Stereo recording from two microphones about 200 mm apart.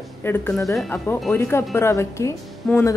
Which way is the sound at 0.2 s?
10° left (ahead or behind).